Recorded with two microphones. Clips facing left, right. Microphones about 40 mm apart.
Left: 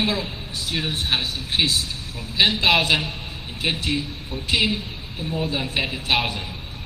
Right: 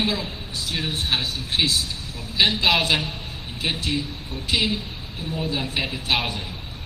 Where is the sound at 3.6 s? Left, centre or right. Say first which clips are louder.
Left 1 dB; centre.